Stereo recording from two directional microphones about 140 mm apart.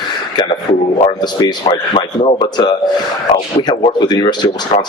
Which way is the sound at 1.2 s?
30° left (ahead or behind).